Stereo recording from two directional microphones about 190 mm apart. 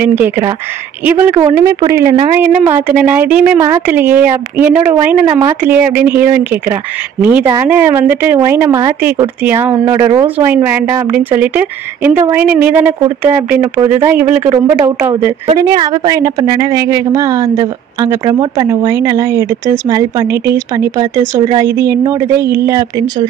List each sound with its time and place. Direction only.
0.0 s speech: 10° right (ahead or behind)
15.4 s speech: 25° right (ahead or behind)